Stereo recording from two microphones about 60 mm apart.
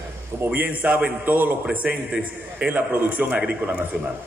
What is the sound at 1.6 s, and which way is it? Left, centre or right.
A man's voice, centre.